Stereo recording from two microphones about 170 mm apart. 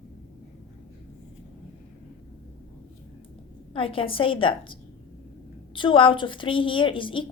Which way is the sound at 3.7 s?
30° left (ahead or behind).